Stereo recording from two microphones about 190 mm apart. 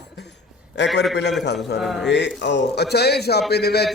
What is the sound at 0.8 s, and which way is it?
Speech, 65° left (ahead or behind).